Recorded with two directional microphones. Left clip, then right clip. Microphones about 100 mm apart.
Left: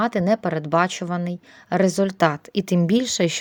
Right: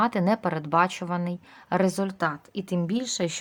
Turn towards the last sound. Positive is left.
turn(degrees=50)  # may be behind; listen again after turning